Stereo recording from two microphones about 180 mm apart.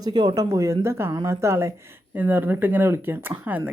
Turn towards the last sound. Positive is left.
turn(degrees=-10)  # may be behind; listen again after turning